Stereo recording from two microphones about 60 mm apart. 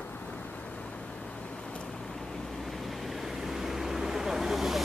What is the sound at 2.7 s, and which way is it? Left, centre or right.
Vehicle, centre.